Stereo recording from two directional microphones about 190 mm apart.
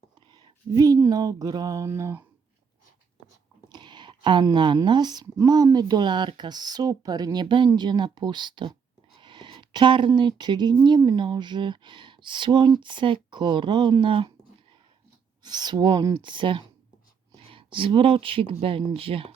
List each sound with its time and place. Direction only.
0.3 s speech: 20° right (ahead or behind)
3.7 s speech: 25° right (ahead or behind)
15.4 s speech: 20° right (ahead or behind)